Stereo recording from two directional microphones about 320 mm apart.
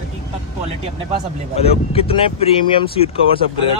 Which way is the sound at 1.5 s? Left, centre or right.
Centre.